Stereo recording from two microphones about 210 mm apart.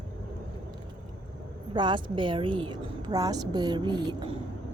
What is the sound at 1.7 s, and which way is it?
A woman's voice, 20° right (ahead or behind).